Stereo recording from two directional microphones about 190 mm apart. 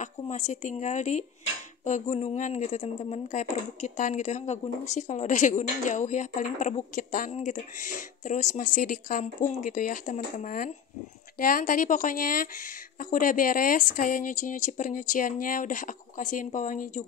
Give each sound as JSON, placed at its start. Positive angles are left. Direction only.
{"t": 0.0, "sound": "speech", "side_deg": 40}